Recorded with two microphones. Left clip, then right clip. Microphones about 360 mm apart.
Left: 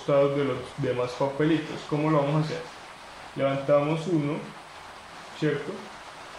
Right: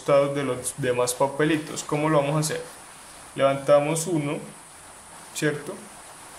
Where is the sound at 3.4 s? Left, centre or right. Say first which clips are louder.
Right 4 dB; right.